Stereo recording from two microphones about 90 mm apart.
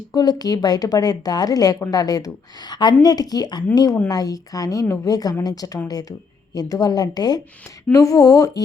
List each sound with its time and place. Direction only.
0.1 s a woman's voice: 50° left (ahead or behind)